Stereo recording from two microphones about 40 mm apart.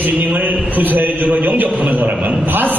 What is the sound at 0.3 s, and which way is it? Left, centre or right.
A man's voice, right.